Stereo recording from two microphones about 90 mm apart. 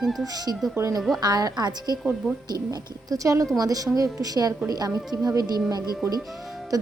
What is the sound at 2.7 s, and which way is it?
A woman's voice, 40° right (ahead or behind).